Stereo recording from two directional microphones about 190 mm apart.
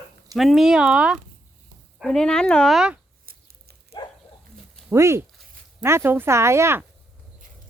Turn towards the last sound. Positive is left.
turn(degrees=-15)  # may be behind; listen again after turning